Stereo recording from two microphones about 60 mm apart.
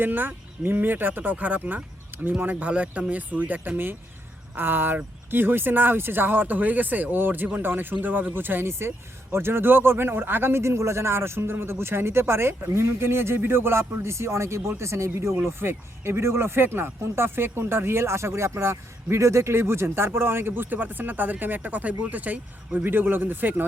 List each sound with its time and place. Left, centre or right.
0.0 s speech: right
15.5 s speech: right